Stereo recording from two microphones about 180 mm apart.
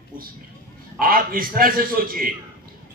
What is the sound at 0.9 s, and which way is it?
A man's voice, 55° right (ahead or behind).